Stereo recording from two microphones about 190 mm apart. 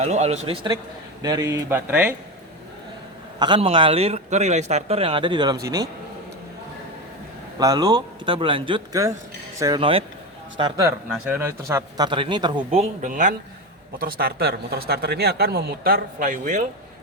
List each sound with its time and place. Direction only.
0.0 s a man's voice: 35° right (ahead or behind)
1.2 s a man's voice: 20° right (ahead or behind)
3.3 s speech: 25° right (ahead or behind)
7.6 s speech: 20° right (ahead or behind)
10.8 s speech: 10° right (ahead or behind); by 13.3 s 40° right (ahead or behind)
14.0 s speech: 50° right (ahead or behind)